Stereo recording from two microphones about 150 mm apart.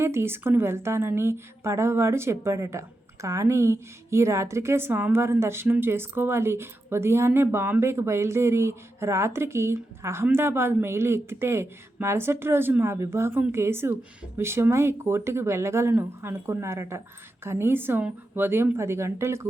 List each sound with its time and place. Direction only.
0.0 s a woman's voice: 15° right (ahead or behind)